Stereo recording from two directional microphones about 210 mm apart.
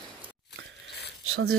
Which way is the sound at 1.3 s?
80° right.